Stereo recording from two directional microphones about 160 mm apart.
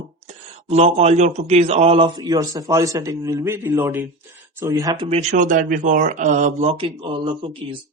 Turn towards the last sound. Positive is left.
turn(degrees=-30)  # may be behind; listen again after turning